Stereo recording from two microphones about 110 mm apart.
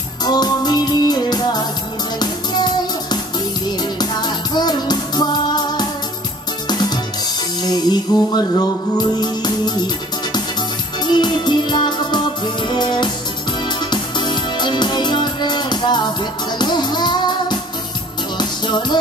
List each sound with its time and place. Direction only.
0.2 s music: 40° left (ahead or behind)
11.1 s music: 45° left (ahead or behind)